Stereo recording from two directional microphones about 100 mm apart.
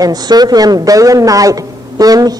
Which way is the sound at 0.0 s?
40° right (ahead or behind).